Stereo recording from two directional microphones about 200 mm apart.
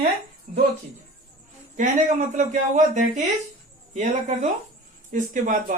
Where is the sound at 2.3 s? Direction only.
35° right (ahead or behind).